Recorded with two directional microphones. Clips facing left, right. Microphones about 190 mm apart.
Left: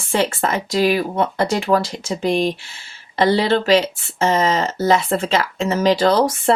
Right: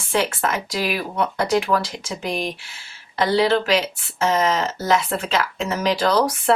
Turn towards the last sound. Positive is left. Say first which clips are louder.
# left 4 dB
turn(degrees=30)  # may be behind; listen again after turning